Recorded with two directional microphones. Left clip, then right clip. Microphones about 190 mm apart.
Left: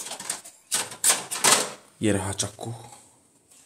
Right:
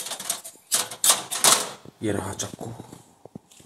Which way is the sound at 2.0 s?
25° left (ahead or behind).